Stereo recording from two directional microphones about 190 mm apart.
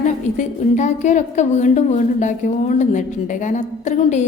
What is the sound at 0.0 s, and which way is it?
A woman's voice, 40° left (ahead or behind).